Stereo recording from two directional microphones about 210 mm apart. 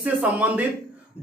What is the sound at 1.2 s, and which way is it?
Music, 30° left (ahead or behind).